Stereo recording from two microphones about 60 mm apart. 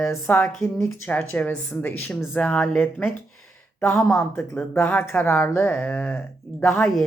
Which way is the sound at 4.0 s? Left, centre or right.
Centre.